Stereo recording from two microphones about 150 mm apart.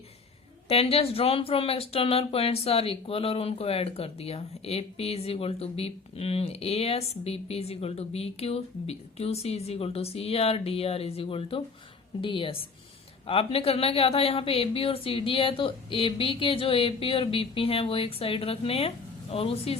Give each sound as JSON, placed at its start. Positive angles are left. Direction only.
{"t": 0.7, "sound": "speech", "side_deg": 40}